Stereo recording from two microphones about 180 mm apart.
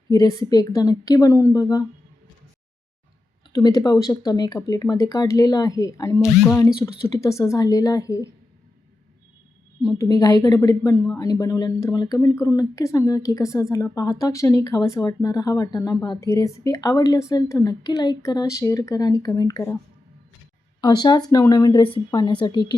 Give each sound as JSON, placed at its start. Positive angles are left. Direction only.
{"t": 0.1, "sound": "speech", "side_deg": 20}
{"t": 3.5, "sound": "a woman's voice", "side_deg": 20}
{"t": 9.8, "sound": "speech", "side_deg": 20}
{"t": 20.8, "sound": "speech", "side_deg": 25}